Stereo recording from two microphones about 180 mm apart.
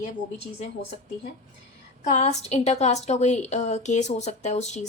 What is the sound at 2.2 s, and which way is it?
A woman's voice, 35° left (ahead or behind).